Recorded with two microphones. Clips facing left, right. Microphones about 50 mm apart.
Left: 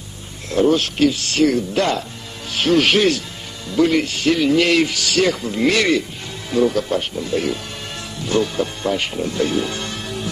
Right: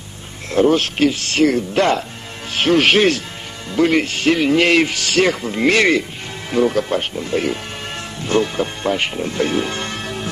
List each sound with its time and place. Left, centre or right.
0.5 s speech: right